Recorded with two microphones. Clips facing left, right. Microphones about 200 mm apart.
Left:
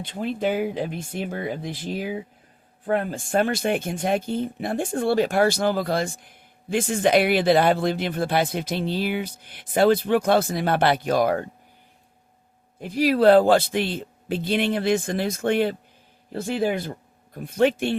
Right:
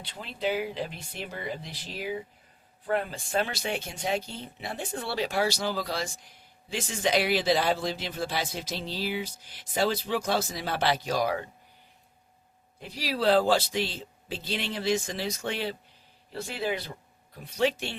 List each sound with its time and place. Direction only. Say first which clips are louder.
0.0 s speech: left 7 dB; 50° left (ahead or behind)
12.8 s speech: left 10 dB; 50° left (ahead or behind)